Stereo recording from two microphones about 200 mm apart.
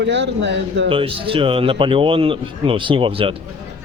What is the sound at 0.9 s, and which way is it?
Speech, 25° right (ahead or behind).